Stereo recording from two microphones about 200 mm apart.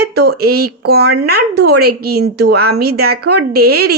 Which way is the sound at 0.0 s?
50° right (ahead or behind).